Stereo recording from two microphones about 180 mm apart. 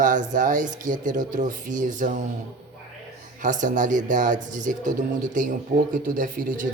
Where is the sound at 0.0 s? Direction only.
45° right (ahead or behind).